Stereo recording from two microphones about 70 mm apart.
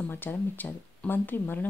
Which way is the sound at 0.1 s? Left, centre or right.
Left.